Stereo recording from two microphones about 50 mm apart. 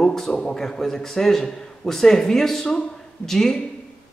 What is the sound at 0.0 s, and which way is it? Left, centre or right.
A man's voice, centre.